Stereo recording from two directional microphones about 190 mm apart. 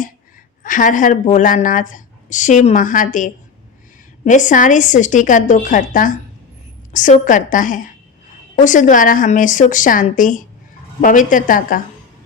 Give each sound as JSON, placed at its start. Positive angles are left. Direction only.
{"t": 0.6, "sound": "a woman's voice", "side_deg": 45}